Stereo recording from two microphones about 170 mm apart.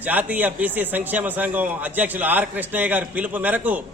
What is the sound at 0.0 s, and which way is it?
A man's voice, 10° right (ahead or behind).